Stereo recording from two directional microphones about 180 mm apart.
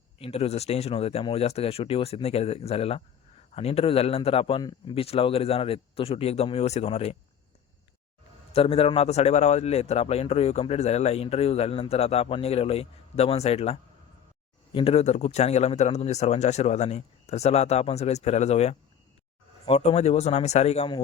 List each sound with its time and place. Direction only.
0.2 s a man's voice: 35° left (ahead or behind)
8.5 s a man's voice: 35° left (ahead or behind)